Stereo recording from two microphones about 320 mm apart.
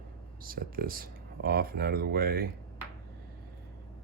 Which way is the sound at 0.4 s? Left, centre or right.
Right.